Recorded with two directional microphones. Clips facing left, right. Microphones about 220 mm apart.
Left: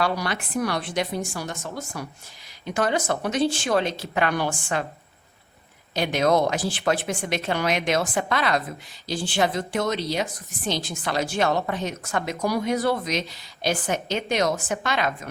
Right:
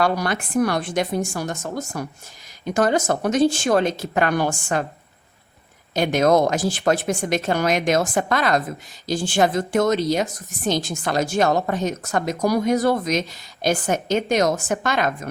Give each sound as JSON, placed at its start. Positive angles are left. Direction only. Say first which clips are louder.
{"t": 0.0, "sound": "a woman's voice", "louder": "right 4 dB", "side_deg": -45}
{"t": 5.9, "sound": "a woman's voice", "louder": "right 4 dB", "side_deg": -45}